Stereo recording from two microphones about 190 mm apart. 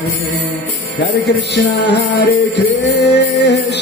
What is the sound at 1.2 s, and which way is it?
Music, 60° left (ahead or behind).